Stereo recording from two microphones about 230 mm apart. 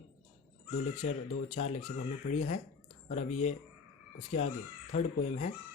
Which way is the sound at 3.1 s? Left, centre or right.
Left.